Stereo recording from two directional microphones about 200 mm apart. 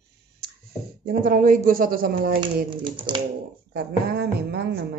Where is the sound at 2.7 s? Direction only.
25° right (ahead or behind).